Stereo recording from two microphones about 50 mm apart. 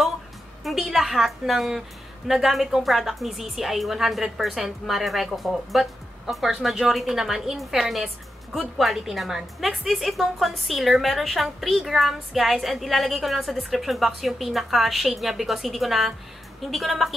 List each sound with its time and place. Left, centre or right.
0.7 s a woman's voice: centre